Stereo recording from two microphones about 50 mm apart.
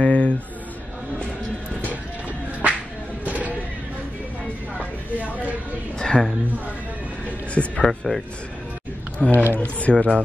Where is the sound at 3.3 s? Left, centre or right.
Right.